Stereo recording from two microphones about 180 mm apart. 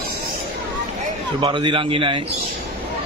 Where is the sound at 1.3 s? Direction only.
25° right (ahead or behind).